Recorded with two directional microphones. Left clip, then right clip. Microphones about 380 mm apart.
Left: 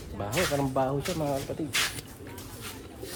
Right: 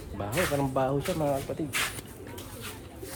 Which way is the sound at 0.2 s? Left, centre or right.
Centre.